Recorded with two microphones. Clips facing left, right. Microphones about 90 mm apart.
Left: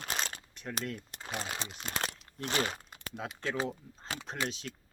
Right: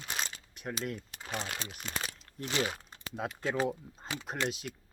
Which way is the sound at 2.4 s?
50° left (ahead or behind).